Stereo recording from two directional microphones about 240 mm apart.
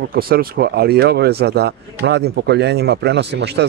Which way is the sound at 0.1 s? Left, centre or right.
Right.